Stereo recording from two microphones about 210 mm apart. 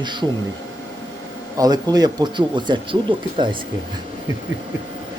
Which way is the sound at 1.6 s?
20° right (ahead or behind).